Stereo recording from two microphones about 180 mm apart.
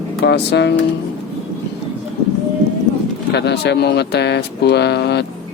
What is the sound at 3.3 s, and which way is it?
Speech, 70° left (ahead or behind).